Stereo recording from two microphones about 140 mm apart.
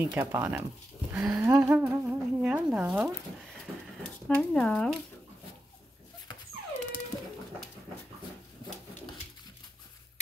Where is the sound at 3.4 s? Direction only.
Centre (ahead or behind).